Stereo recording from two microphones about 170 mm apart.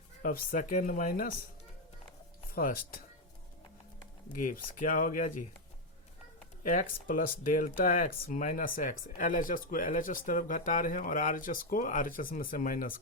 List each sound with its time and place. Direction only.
0.2 s speech: 50° left (ahead or behind)
2.6 s speech: 55° left (ahead or behind)
4.3 s speech: 50° left (ahead or behind)
6.6 s speech: 50° left (ahead or behind)